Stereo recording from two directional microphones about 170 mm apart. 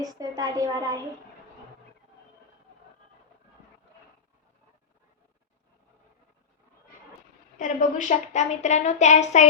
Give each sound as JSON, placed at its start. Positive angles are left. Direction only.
{"t": 0.0, "sound": "a woman's voice", "side_deg": -20}
{"t": 7.6, "sound": "a child's voice", "side_deg": 50}